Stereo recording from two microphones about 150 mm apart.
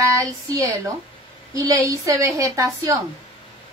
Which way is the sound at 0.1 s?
20° right (ahead or behind).